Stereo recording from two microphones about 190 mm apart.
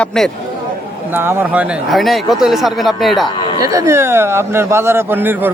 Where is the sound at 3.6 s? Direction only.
15° right (ahead or behind).